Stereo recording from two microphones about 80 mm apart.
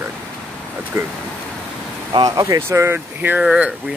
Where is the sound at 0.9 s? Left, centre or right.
Right.